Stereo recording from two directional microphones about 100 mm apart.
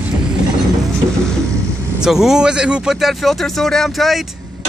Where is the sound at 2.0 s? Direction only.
5° right (ahead or behind).